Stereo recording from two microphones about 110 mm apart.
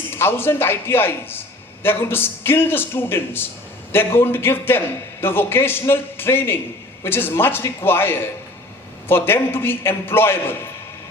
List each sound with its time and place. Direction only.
0.1 s a man's voice: 20° left (ahead or behind)